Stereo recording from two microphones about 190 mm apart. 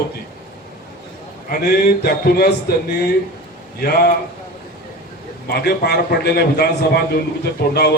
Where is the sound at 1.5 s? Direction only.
50° left (ahead or behind).